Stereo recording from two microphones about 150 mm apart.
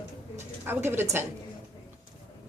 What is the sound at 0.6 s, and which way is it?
Speech, 15° right (ahead or behind).